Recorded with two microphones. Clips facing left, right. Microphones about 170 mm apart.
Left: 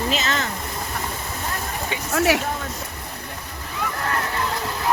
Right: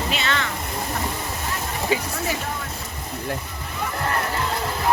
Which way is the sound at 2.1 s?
75° left (ahead or behind).